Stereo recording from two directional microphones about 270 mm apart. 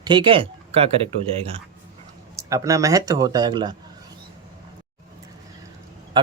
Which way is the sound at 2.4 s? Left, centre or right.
Centre.